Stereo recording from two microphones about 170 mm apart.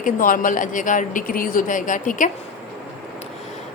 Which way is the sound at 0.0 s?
50° left (ahead or behind).